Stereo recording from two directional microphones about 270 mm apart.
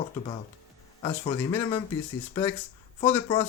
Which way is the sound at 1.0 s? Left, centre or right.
Centre.